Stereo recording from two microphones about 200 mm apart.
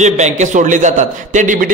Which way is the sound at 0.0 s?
35° right (ahead or behind).